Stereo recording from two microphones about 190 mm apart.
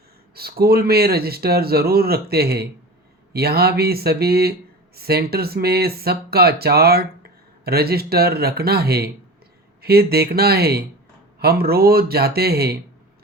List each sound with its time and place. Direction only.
0.3 s speech: 55° right (ahead or behind)